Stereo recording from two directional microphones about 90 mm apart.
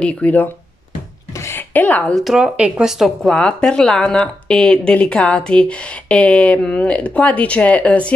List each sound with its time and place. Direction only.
0.0 s speech: 15° left (ahead or behind)
1.4 s a sound: 25° left (ahead or behind)
2.1 s speech: 5° right (ahead or behind)
3.3 s speech: 10° left (ahead or behind)